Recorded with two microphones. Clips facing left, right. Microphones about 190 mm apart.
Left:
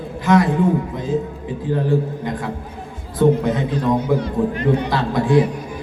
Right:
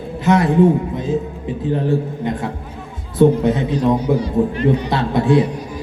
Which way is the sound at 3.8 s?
15° right (ahead or behind).